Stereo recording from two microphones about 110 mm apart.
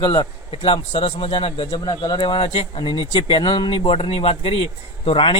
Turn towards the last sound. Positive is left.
turn(degrees=55)  # may be behind; listen again after turning